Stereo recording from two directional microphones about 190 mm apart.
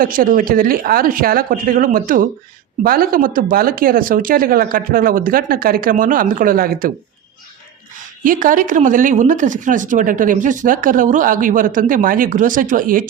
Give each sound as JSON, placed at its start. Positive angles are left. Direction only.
{"t": 0.0, "sound": "speech", "side_deg": -50}
{"t": 8.2, "sound": "speech", "side_deg": -45}